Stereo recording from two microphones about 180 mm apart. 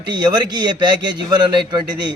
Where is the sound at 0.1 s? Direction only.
25° right (ahead or behind).